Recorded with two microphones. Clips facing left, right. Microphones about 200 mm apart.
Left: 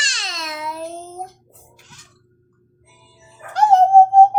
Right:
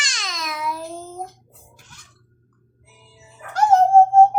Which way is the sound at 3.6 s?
15° left (ahead or behind).